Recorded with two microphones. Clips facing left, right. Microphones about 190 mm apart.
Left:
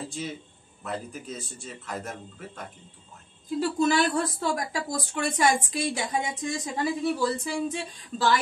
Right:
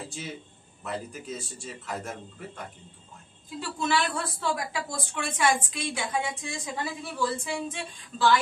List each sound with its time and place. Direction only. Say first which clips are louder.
0.8 s a man's voice: even; centre (ahead or behind)
3.5 s a woman's voice: left 5 dB; 40° left (ahead or behind)